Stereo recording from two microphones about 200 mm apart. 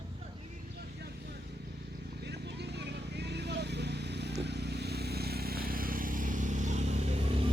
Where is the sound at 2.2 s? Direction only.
55° right (ahead or behind); by 7.5 s 30° right (ahead or behind).